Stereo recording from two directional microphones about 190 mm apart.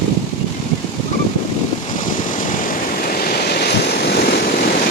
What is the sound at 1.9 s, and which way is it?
Waves, 45° left (ahead or behind).